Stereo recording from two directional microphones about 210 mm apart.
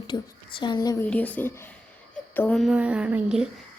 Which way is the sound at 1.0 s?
5° left (ahead or behind).